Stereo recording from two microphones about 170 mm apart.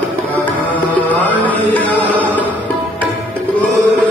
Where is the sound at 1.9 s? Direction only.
10° left (ahead or behind).